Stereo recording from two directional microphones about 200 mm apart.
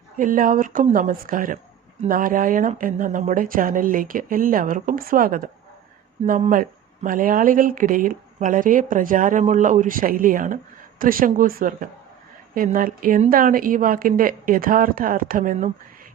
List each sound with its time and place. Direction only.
0.2 s speech: 45° right (ahead or behind)